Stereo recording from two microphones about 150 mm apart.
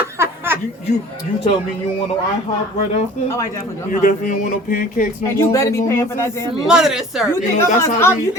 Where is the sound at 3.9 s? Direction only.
60° left (ahead or behind).